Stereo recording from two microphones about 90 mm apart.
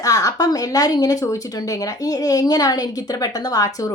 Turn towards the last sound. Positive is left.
turn(degrees=40)  # may be behind; listen again after turning